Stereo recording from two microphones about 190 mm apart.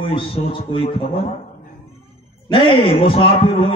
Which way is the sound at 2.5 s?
25° left (ahead or behind).